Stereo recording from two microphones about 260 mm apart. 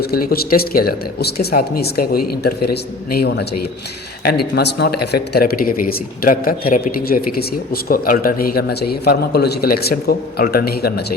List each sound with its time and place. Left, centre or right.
0.0 s speech: left
3.1 s speech: left